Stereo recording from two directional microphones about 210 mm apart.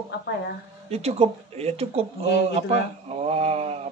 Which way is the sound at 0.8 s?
30° right (ahead or behind).